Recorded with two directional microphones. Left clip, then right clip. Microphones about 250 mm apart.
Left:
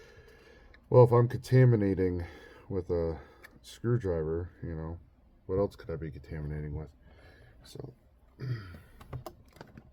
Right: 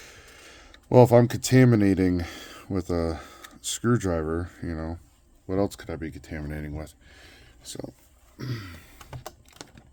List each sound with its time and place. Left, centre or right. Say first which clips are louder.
0.0 s a sound: right 8 dB; right
0.9 s speech: right 5 dB; right
8.4 s speech: right 7 dB; right